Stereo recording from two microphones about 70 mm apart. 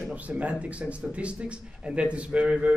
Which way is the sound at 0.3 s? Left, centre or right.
Centre.